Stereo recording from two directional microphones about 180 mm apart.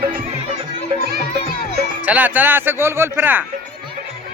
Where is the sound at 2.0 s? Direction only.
10° right (ahead or behind).